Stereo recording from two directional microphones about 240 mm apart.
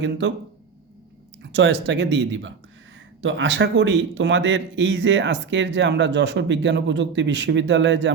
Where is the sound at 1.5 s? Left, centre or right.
Right.